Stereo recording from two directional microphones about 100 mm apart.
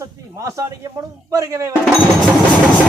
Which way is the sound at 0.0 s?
30° right (ahead or behind).